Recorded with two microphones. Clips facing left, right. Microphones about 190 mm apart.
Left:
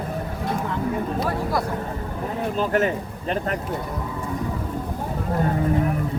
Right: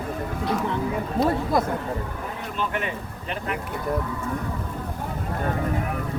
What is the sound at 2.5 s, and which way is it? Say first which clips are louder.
Speech: left 7 dB; 40° left (ahead or behind).